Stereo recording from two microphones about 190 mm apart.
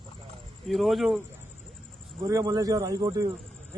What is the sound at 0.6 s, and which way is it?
Speech, centre (ahead or behind).